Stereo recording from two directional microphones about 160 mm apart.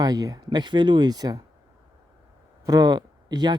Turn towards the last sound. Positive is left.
turn(degrees=-25)  # may be behind; listen again after turning